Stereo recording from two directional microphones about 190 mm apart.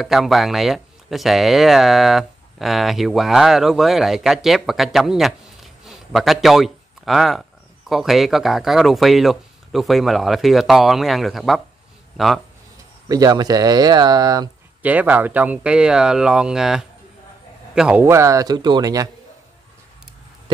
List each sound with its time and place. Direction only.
0.0 s speech: centre (ahead or behind)
13.1 s speech: 20° right (ahead or behind)
14.8 s a man's voice: 10° right (ahead or behind)